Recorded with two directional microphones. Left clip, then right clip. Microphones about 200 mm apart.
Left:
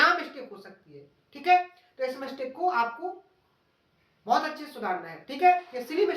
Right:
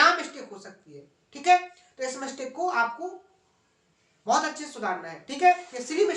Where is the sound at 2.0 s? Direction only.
15° right (ahead or behind).